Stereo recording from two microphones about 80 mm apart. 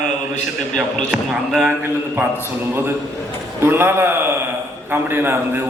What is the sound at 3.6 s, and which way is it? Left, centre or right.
A man's voice, right.